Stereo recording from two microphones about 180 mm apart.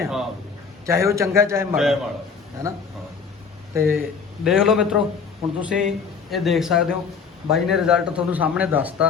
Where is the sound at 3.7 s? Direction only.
15° right (ahead or behind).